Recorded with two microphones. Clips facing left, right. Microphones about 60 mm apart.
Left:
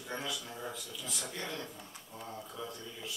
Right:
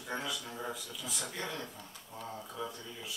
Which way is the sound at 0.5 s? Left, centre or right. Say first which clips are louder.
Right 2 dB; centre.